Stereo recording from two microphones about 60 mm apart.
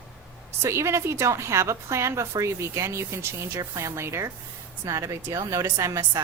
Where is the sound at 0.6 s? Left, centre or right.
Right.